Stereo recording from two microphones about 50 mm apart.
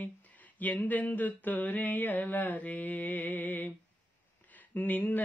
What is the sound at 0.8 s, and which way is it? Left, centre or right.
Speech, left.